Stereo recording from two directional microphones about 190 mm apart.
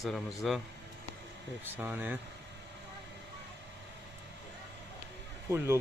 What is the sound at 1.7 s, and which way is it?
Speech, 10° right (ahead or behind).